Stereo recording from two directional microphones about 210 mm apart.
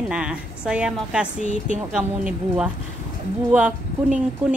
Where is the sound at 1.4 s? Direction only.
35° right (ahead or behind).